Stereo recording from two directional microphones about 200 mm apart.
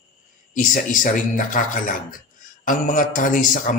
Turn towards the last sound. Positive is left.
turn(degrees=40)  # may be behind; listen again after turning